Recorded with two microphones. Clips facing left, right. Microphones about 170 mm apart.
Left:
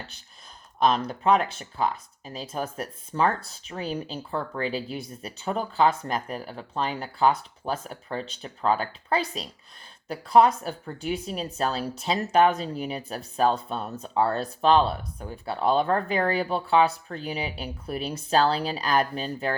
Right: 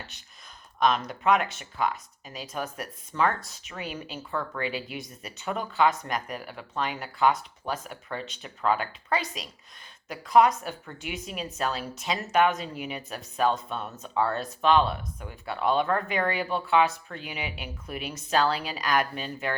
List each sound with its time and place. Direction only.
0.8 s speech: 35° left (ahead or behind)